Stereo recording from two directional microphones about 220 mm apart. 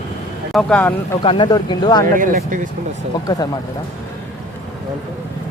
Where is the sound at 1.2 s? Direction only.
20° left (ahead or behind).